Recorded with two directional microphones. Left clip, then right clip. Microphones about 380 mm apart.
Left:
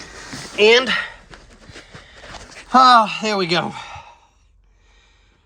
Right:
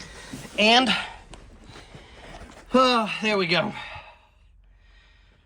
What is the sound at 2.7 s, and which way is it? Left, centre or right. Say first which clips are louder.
Speech: left 9 dB; centre.